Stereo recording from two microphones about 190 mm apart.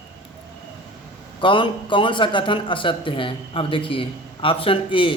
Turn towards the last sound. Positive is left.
turn(degrees=25)  # may be behind; listen again after turning